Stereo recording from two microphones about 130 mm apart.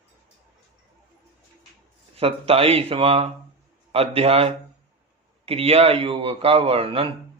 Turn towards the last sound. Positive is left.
turn(degrees=-45)  # may be behind; listen again after turning